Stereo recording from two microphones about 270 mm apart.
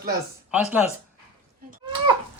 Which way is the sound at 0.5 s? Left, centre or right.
Centre.